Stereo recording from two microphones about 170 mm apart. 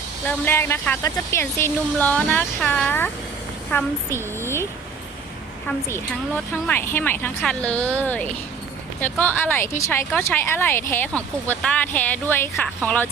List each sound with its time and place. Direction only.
0.3 s speech: 10° left (ahead or behind)
4.4 s a sound: 15° left (ahead or behind)
5.6 s speech: 15° left (ahead or behind)